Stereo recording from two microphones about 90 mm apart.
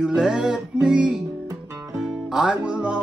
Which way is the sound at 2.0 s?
5° right (ahead or behind).